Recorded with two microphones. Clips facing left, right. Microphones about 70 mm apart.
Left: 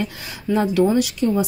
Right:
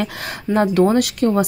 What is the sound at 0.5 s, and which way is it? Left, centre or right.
Speech, right.